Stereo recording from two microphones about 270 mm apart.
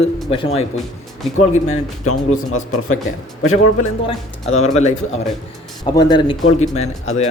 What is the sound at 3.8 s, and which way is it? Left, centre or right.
Speech, left.